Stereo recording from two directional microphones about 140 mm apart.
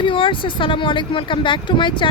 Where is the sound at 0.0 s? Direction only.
35° left (ahead or behind).